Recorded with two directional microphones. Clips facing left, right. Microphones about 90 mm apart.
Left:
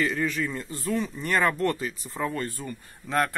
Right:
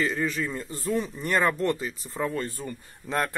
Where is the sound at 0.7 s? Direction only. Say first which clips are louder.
Right 1 dB; 35° right (ahead or behind).